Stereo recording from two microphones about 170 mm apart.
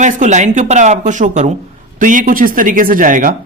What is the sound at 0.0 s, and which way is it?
Speech, 45° right (ahead or behind).